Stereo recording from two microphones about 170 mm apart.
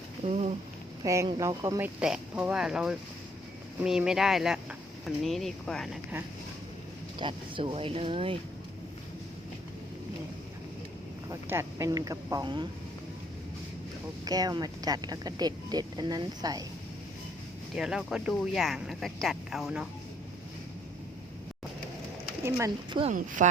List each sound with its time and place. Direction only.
0.3 s speech: 40° right (ahead or behind)
1.0 s speech: 15° right (ahead or behind)
2.0 s speech: 5° right (ahead or behind)
7.2 s speech: 30° right (ahead or behind)
11.3 s speech: 15° right (ahead or behind)
14.3 s speech: 25° right (ahead or behind)
17.7 s speech: 5° right (ahead or behind)
22.4 s speech: 15° right (ahead or behind)
22.9 s speech: 30° right (ahead or behind)
23.1 s speech: 50° right (ahead or behind)